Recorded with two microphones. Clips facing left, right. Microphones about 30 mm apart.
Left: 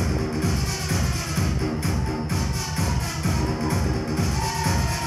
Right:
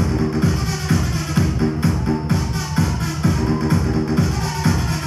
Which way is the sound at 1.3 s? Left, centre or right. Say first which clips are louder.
Right 8 dB; right.